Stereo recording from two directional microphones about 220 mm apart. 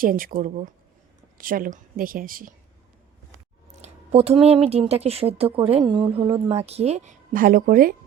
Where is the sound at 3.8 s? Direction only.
30° right (ahead or behind).